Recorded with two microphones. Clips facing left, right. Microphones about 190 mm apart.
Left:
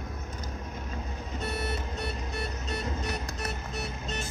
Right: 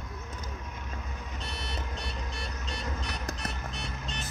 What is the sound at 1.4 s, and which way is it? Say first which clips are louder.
Vehicle: left 7 dB; 5° left (ahead or behind).